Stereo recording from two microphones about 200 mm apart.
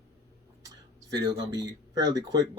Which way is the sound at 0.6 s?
20° right (ahead or behind).